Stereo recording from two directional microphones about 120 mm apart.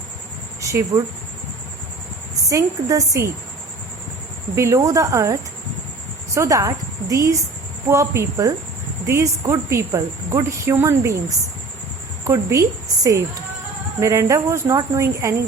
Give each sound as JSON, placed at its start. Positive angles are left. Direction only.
{"t": 0.6, "sound": "a woman's voice", "side_deg": -25}
{"t": 2.5, "sound": "a woman's voice", "side_deg": -25}
{"t": 4.5, "sound": "a woman's voice", "side_deg": -25}
{"t": 12.2, "sound": "a woman's voice", "side_deg": -25}